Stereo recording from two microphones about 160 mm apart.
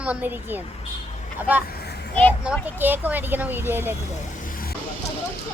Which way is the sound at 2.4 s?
10° right (ahead or behind).